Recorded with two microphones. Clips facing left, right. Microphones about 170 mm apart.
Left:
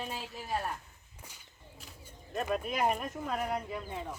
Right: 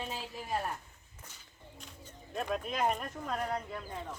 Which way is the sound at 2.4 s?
5° left (ahead or behind).